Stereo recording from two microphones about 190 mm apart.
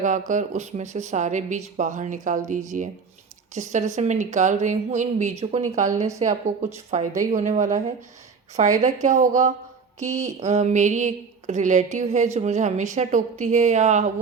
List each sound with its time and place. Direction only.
0.0 s speech: 40° right (ahead or behind)